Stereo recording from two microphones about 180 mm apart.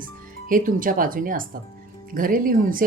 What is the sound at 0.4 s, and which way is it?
A woman's voice, 50° right (ahead or behind).